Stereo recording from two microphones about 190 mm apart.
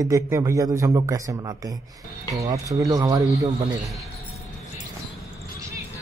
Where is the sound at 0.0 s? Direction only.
15° right (ahead or behind).